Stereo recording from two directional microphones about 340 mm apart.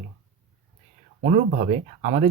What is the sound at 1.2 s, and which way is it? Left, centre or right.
Speech, centre.